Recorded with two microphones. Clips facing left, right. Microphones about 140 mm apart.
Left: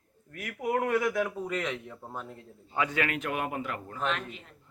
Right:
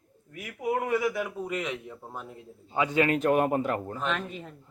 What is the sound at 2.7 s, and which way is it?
A man's voice, 20° right (ahead or behind).